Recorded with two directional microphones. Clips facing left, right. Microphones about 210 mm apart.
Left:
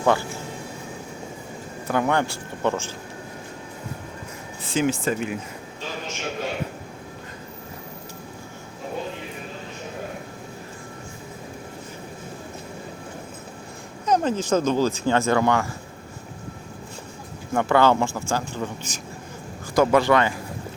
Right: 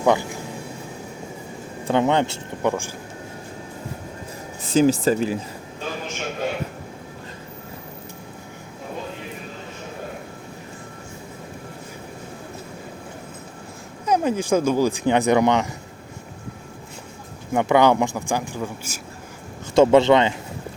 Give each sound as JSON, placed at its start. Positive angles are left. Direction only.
{"t": 0.0, "sound": "speech", "side_deg": -15}
{"t": 1.9, "sound": "speech", "side_deg": -20}
{"t": 4.6, "sound": "speech", "side_deg": -40}
{"t": 14.0, "sound": "speech", "side_deg": -10}
{"t": 17.5, "sound": "speech", "side_deg": -15}
{"t": 19.7, "sound": "speech", "side_deg": -25}